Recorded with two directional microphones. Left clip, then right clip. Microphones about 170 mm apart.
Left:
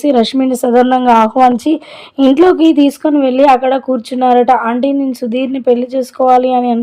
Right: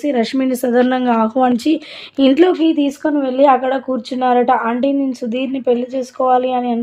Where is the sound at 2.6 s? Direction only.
45° left (ahead or behind).